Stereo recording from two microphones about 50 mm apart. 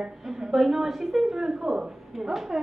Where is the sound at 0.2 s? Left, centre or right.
Centre.